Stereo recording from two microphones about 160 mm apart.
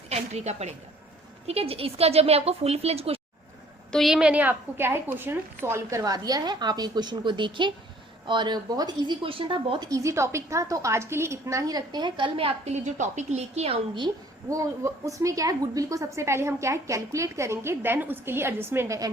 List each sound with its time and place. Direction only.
0.1 s a woman's voice: 45° right (ahead or behind)
3.9 s a woman's voice: centre (ahead or behind); by 9.9 s 35° right (ahead or behind)
9.9 s a woman's voice: 20° right (ahead or behind); by 14.1 s 35° right (ahead or behind)
14.5 s a woman's voice: 20° right (ahead or behind)